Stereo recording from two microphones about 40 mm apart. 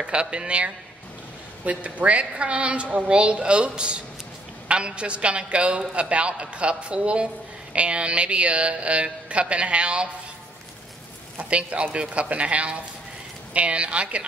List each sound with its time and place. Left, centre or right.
0.0 s a man's voice: right
11.5 s speech: right